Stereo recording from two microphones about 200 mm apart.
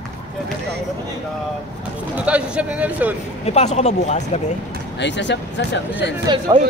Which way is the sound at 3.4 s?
30° left (ahead or behind).